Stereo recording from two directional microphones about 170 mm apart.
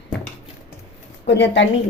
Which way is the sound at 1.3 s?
90° left.